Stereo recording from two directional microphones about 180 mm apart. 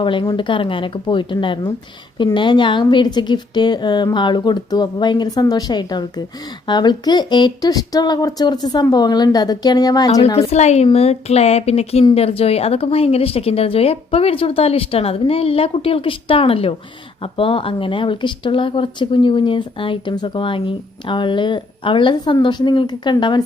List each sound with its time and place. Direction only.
0.0 s speech: 25° left (ahead or behind)
10.5 s speech: 40° left (ahead or behind)